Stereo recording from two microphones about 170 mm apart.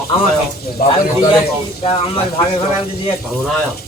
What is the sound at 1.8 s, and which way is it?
Speech, 35° left (ahead or behind).